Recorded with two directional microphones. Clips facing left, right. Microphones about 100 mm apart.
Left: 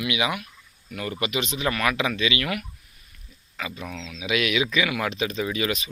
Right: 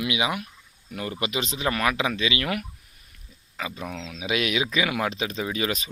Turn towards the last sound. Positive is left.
turn(degrees=-30)  # may be behind; listen again after turning